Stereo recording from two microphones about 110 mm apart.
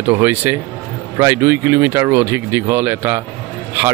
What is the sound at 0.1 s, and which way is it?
Speech, 20° right (ahead or behind).